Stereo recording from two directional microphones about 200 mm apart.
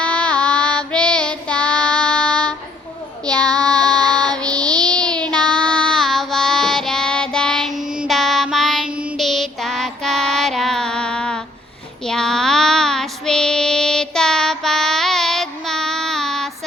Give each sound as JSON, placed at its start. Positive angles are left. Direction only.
{"t": 0.0, "sound": "child singing", "side_deg": 5}